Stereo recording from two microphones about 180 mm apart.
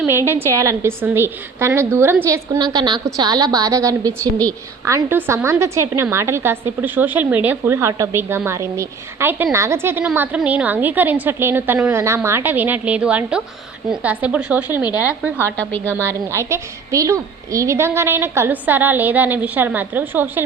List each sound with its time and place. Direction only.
0.3 s a woman's voice: 15° right (ahead or behind)